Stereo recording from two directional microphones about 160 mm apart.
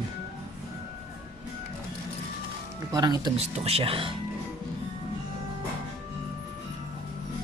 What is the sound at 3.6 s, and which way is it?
Speech, 40° right (ahead or behind).